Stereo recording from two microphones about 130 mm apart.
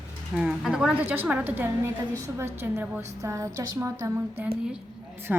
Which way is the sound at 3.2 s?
25° right (ahead or behind).